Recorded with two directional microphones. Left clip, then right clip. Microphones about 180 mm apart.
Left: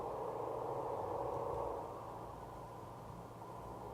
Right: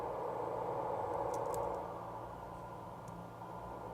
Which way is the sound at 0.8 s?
30° right (ahead or behind).